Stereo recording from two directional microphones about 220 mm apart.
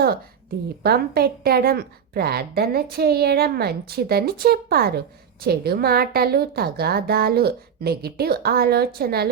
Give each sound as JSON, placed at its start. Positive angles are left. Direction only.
{"t": 0.8, "sound": "a woman's voice", "side_deg": -45}